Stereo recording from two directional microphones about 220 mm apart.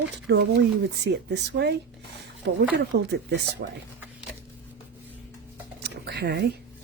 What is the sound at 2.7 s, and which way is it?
Speech, 50° right (ahead or behind).